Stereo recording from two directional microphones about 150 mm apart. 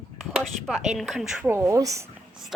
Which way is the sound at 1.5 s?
20° right (ahead or behind).